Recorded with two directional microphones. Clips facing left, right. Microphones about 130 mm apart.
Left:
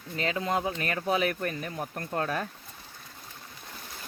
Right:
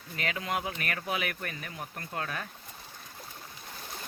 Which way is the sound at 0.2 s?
30° left (ahead or behind).